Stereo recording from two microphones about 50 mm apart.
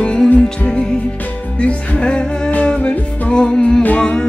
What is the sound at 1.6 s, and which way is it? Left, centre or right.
Music, left.